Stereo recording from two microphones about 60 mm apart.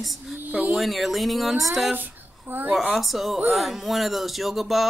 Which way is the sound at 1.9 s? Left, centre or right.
Right.